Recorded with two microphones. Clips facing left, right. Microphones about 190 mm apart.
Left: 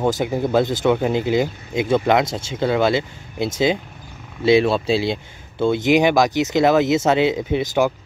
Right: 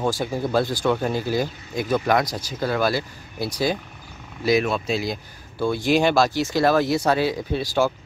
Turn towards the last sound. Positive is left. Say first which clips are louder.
# left 3 dB
turn(degrees=20)  # may be behind; listen again after turning